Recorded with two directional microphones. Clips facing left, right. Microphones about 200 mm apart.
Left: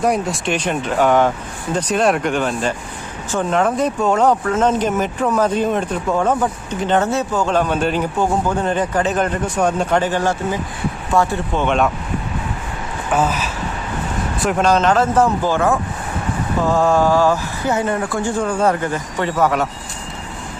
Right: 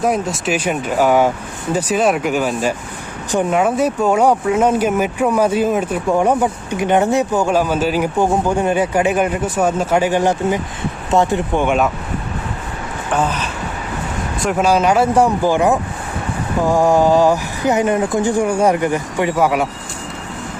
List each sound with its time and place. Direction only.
0.0 s speech: centre (ahead or behind)
13.1 s speech: 5° left (ahead or behind)
14.4 s speech: 10° right (ahead or behind)